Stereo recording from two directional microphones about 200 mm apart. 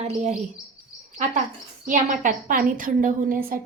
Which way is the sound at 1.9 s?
40° right (ahead or behind).